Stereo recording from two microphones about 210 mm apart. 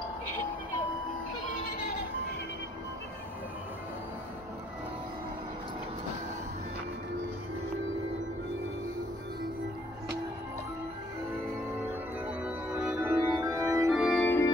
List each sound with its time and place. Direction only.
0.7 s music: 20° left (ahead or behind)
12.7 s music: 5° right (ahead or behind)
13.8 s organ: centre (ahead or behind)
14.2 s organ: 10° left (ahead or behind)